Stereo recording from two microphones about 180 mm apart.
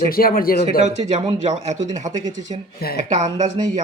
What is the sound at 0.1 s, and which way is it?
Speech, 55° left (ahead or behind).